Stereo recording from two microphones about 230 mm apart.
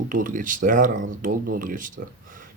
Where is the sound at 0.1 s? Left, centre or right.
Right.